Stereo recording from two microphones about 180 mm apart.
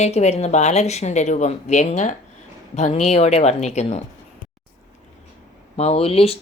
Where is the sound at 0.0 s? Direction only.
35° left (ahead or behind).